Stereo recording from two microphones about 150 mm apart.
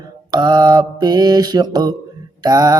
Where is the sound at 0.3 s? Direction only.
25° right (ahead or behind).